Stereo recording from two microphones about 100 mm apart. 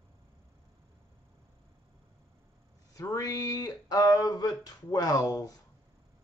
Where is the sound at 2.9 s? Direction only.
35° left (ahead or behind).